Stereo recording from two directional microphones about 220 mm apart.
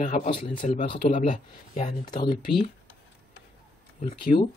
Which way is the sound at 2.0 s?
20° left (ahead or behind).